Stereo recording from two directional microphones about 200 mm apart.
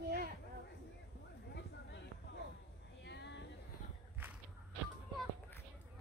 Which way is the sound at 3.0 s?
60° left (ahead or behind).